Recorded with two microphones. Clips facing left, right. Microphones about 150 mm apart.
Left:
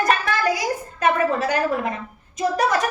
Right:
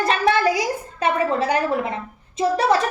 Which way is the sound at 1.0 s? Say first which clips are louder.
Even; 30° right (ahead or behind).